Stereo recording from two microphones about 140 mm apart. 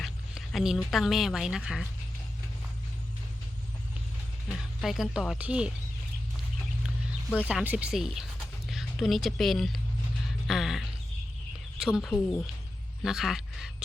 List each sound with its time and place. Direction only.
0.0 s a woman's voice: centre (ahead or behind)
4.4 s speech: centre (ahead or behind)
7.4 s speech: 10° right (ahead or behind)
10.4 s music: centre (ahead or behind)
11.8 s speech: 5° right (ahead or behind)
13.0 s a sound: 5° right (ahead or behind)